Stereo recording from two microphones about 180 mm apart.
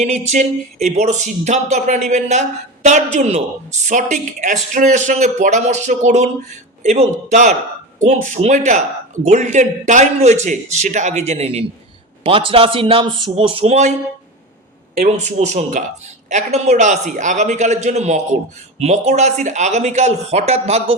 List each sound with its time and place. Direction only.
0.0 s a woman's voice: 40° right (ahead or behind)
15.1 s speech: 40° right (ahead or behind)